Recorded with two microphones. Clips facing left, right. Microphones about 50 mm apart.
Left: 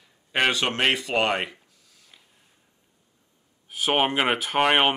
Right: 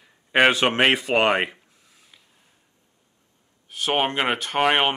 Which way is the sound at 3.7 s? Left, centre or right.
Centre.